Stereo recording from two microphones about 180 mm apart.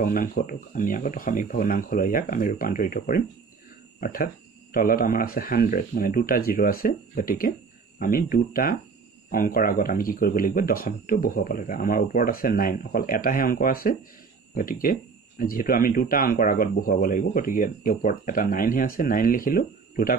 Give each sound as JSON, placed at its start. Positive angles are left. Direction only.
{"t": 0.0, "sound": "speech", "side_deg": 50}